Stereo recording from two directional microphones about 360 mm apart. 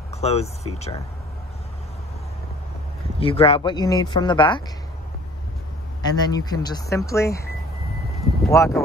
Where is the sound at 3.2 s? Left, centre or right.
Centre.